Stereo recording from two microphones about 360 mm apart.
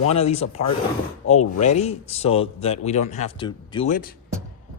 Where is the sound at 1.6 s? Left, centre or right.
Centre.